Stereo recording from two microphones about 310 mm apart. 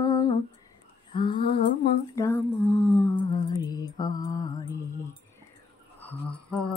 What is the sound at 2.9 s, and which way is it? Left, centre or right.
Mantra, centre.